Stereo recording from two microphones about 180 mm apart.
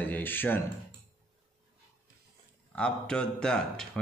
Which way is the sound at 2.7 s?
5° left (ahead or behind).